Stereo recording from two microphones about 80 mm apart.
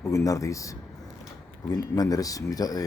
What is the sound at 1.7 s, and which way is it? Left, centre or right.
Speech, left.